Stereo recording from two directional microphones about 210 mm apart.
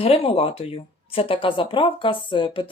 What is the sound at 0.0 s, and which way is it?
Speech, 25° left (ahead or behind).